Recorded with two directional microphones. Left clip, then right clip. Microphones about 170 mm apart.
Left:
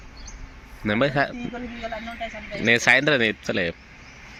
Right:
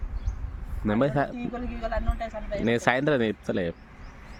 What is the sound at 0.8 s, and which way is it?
Speech, 10° right (ahead or behind).